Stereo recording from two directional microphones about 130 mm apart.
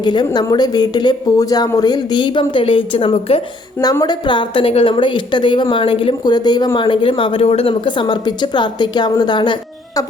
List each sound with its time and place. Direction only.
0.0 s a woman's voice: 35° left (ahead or behind)
3.8 s a woman's voice: 30° left (ahead or behind)